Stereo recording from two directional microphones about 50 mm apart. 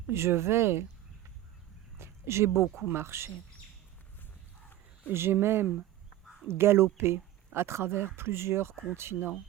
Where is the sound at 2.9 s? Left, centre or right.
Right.